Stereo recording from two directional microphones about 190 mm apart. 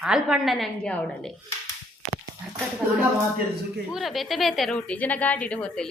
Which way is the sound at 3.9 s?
Centre (ahead or behind).